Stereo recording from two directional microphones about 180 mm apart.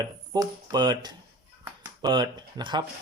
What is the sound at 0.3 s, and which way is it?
Speech, 20° right (ahead or behind).